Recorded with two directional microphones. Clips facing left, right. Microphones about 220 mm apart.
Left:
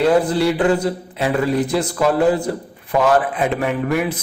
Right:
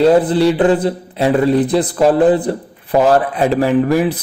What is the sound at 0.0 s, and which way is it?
Speech, 30° right (ahead or behind).